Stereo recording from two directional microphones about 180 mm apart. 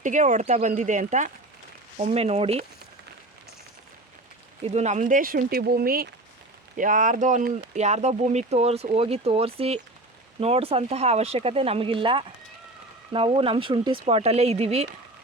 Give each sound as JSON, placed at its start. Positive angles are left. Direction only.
{"t": 0.0, "sound": "speech", "side_deg": -40}
{"t": 4.6, "sound": "speech", "side_deg": -40}